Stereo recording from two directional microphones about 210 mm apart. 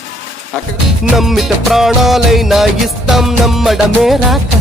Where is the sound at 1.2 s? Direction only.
Centre (ahead or behind).